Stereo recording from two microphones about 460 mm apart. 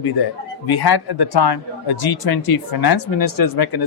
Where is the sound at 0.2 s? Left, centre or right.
Left.